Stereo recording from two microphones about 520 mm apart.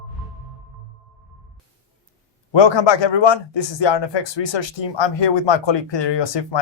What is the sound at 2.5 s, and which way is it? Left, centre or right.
A man's voice, left.